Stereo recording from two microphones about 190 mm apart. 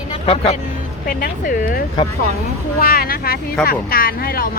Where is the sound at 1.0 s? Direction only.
50° left (ahead or behind).